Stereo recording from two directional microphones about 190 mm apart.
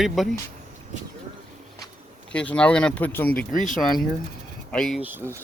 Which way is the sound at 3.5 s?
45° left (ahead or behind).